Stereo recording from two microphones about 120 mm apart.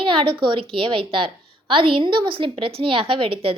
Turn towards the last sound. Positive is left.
turn(degrees=-50)  # may be behind; listen again after turning